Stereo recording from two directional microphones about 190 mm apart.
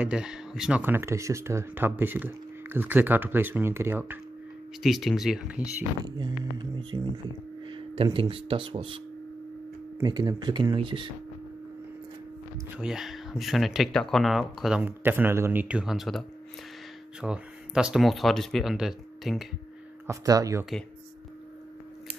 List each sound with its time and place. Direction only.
0.0 s speech: 5° right (ahead or behind)
4.8 s speech: centre (ahead or behind)
6.0 s speech: 25° right (ahead or behind)
12.7 s speech: centre (ahead or behind)
20.1 s speech: 20° right (ahead or behind)